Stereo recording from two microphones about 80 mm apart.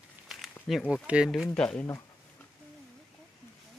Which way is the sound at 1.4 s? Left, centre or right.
Centre.